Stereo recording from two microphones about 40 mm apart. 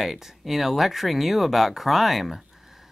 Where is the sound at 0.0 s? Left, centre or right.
Centre.